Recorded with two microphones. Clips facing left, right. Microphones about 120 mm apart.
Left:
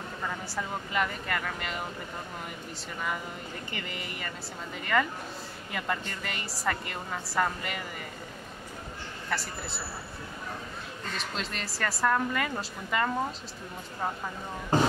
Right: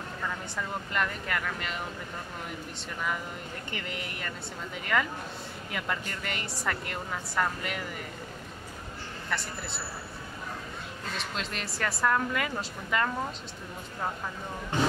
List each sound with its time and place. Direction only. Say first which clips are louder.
0.6 s a woman's voice: left 1 dB; 5° left (ahead or behind)
3.7 s a woman's voice: right 2 dB; centre (ahead or behind)
9.3 s a woman's voice: left 1 dB; centre (ahead or behind)
11.1 s a woman's voice: even; centre (ahead or behind)
14.7 s speech: left 3 dB; 35° left (ahead or behind)